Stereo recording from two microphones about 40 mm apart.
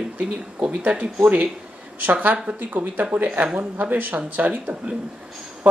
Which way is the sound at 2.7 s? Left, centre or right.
Right.